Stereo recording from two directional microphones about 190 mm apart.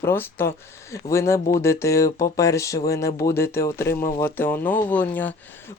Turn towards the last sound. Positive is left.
turn(degrees=10)  # may be behind; listen again after turning